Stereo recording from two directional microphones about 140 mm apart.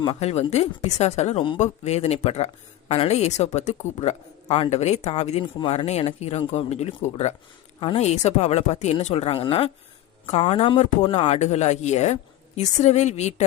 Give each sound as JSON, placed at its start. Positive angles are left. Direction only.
{"t": 0.0, "sound": "speech", "side_deg": 45}
{"t": 5.4, "sound": "a woman's voice", "side_deg": 35}
{"t": 5.7, "sound": "a woman's voice", "side_deg": 50}